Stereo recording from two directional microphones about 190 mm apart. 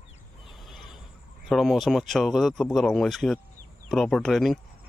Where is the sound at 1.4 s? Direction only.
Centre (ahead or behind).